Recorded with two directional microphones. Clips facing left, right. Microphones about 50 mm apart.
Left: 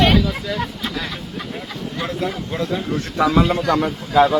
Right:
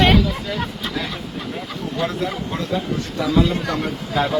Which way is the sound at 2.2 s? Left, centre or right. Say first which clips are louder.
Left 1 dB; centre.